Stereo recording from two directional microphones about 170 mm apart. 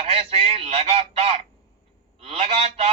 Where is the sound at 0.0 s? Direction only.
40° right (ahead or behind).